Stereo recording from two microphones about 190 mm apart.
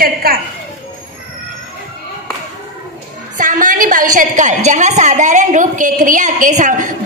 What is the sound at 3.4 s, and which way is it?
A woman's voice, 40° right (ahead or behind).